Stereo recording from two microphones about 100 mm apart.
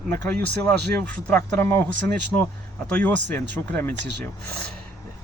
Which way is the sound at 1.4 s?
25° left (ahead or behind).